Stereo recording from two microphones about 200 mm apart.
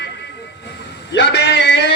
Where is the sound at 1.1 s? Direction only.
60° left (ahead or behind).